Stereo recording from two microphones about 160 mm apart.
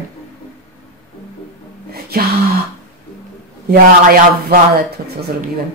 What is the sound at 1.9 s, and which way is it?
Music, 75° right (ahead or behind).